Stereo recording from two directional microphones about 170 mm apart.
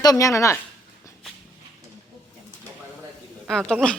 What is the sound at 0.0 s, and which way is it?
Speech, 20° left (ahead or behind).